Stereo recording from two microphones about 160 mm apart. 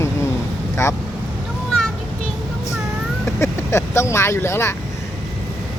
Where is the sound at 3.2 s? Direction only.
15° left (ahead or behind).